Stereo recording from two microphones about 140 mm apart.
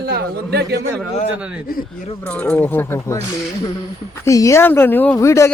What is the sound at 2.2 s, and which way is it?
Speech, 15° left (ahead or behind).